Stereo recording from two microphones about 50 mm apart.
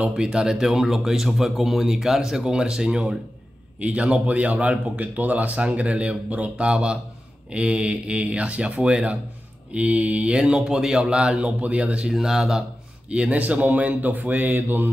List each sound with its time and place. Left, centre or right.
0.0 s speech: centre
3.8 s speech: right
10.3 s speech: centre
12.1 s speech: centre
13.1 s speech: right